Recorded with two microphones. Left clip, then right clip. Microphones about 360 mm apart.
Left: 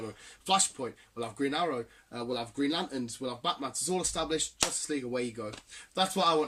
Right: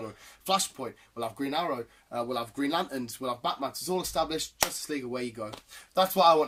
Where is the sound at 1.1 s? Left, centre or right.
Centre.